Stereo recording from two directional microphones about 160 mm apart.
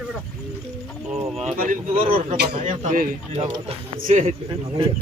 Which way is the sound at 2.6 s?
55° right (ahead or behind).